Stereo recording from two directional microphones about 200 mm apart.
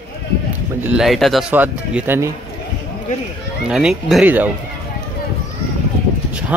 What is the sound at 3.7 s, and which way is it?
Speech, centre (ahead or behind).